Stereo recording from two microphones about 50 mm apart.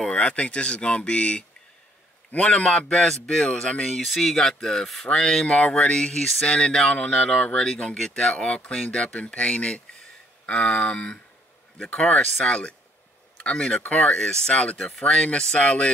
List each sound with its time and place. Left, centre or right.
0.1 s speech: left
2.9 s speech: centre
4.0 s speech: centre
6.4 s speech: left